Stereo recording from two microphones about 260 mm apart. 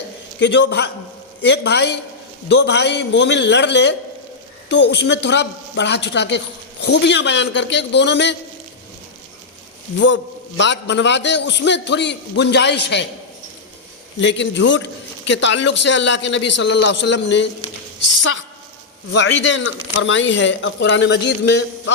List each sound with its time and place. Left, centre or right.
0.3 s a man's voice: left
10.6 s a man's voice: left
14.2 s a man's voice: left